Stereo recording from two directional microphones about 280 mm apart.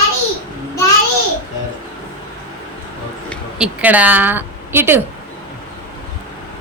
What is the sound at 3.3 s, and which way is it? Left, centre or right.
Speech, centre.